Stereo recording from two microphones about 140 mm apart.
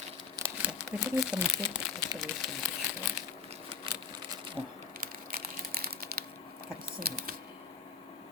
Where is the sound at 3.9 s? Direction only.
40° right (ahead or behind).